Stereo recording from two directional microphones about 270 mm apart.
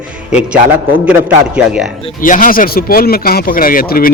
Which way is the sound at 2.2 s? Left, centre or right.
Left.